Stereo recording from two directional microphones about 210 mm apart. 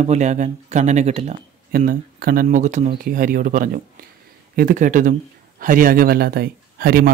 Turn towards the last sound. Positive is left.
turn(degrees=-45)  # may be behind; listen again after turning